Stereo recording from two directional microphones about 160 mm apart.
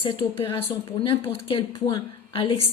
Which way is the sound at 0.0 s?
35° left (ahead or behind).